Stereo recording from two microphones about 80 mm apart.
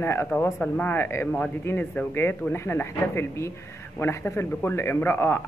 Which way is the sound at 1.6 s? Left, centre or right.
Left.